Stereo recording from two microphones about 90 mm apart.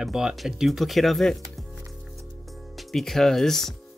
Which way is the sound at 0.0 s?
5° right (ahead or behind).